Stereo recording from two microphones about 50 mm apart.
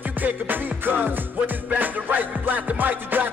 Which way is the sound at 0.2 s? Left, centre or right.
Right.